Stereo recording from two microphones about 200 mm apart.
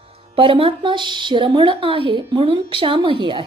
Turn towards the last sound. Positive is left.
turn(degrees=-25)  # may be behind; listen again after turning